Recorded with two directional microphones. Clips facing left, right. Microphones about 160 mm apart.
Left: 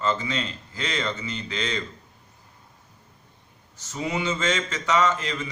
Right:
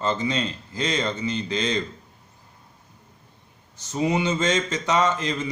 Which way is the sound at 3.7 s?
20° right (ahead or behind).